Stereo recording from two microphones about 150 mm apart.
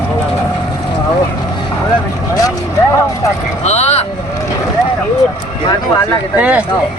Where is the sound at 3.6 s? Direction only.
45° left (ahead or behind).